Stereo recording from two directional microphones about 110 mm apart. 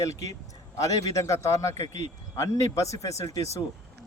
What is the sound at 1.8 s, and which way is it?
Speech, 80° right.